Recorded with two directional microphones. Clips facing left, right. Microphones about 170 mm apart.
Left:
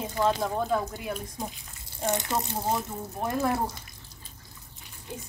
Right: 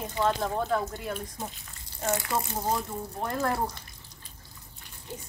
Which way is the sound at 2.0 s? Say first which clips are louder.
Left 1 dB; 20° left (ahead or behind).